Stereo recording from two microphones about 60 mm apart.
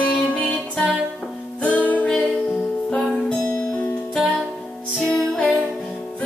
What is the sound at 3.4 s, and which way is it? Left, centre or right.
Music, left.